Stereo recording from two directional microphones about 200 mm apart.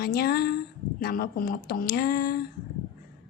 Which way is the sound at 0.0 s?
50° left (ahead or behind).